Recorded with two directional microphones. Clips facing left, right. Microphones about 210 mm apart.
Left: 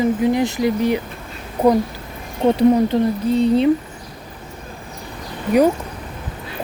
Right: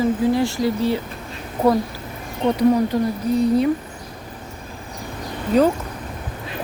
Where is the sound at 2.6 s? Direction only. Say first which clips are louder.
Left 2 dB; 25° left (ahead or behind).